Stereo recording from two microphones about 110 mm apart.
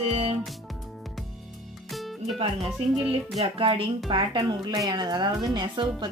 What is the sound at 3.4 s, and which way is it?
Speech, 55° right (ahead or behind).